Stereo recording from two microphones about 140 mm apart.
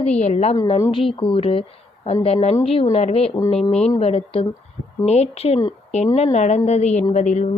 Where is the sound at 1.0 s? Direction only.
40° left (ahead or behind).